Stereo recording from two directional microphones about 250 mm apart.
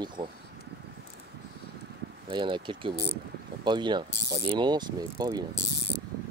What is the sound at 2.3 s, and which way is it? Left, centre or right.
Speech, centre.